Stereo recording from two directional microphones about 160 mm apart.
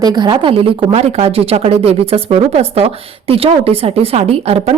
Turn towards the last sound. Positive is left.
turn(degrees=-40)  # may be behind; listen again after turning